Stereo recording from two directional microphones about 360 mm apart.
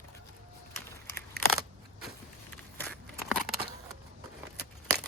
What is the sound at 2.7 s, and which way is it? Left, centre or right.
Crackle, centre.